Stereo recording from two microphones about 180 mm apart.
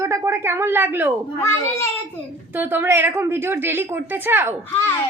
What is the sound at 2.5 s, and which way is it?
A woman's voice, 10° right (ahead or behind).